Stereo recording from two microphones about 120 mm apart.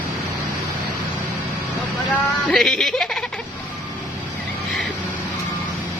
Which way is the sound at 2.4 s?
5° left (ahead or behind).